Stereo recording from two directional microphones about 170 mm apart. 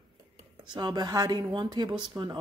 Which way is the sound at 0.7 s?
25° right (ahead or behind).